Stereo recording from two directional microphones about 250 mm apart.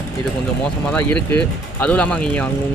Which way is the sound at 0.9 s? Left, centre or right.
Centre.